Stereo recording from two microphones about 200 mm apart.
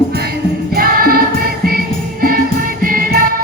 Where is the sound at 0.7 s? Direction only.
45° right (ahead or behind).